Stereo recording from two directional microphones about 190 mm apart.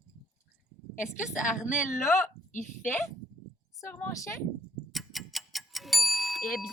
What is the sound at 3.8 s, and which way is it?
Speech, 15° left (ahead or behind).